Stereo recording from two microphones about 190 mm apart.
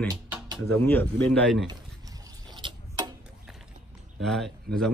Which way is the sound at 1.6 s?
25° right (ahead or behind).